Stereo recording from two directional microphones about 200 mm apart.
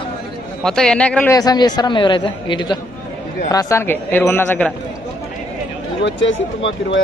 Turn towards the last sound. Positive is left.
turn(degrees=65)  # may be behind; listen again after turning